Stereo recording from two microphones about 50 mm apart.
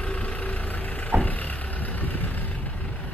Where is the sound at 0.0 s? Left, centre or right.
Left.